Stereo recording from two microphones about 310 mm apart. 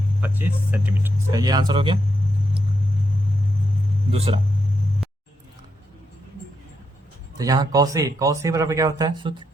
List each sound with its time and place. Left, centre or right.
0.2 s speech: centre
4.1 s speech: centre
7.3 s speech: centre